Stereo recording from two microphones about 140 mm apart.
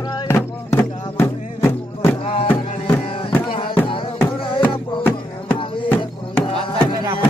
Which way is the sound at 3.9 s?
40° left (ahead or behind).